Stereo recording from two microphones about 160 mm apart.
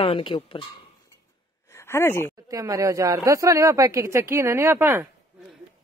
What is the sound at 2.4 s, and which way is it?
Speech, 20° right (ahead or behind).